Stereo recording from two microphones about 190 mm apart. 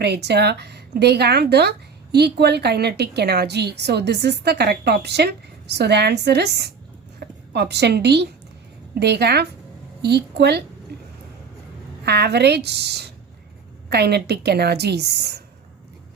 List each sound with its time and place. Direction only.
0.0 s a woman's voice: 60° right (ahead or behind)
12.0 s a woman's voice: 60° right (ahead or behind)